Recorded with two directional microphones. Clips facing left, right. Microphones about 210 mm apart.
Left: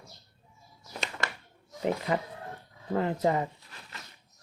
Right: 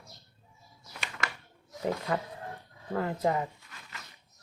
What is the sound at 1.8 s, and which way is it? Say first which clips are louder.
Speech: left 2 dB; 20° left (ahead or behind).